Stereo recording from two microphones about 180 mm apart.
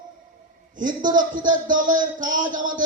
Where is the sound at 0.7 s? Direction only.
45° right (ahead or behind).